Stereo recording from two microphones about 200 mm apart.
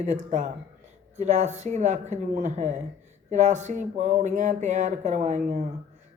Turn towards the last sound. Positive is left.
turn(degrees=-35)  # may be behind; listen again after turning